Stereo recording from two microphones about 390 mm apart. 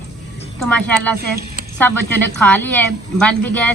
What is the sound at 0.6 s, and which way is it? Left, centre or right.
A woman's voice, centre.